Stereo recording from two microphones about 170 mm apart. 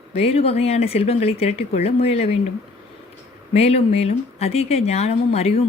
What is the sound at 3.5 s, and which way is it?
A woman's voice, 40° left (ahead or behind).